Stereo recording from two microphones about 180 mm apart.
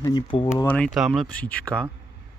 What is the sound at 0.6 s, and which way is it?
Speech, 5° left (ahead or behind).